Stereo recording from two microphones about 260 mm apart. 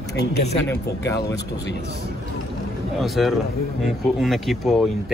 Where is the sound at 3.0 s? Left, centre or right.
Centre.